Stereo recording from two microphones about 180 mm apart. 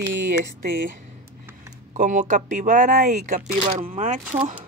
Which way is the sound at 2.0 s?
45° right (ahead or behind).